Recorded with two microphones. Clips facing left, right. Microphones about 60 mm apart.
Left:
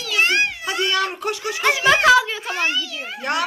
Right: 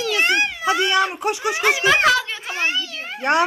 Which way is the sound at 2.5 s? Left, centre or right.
Right.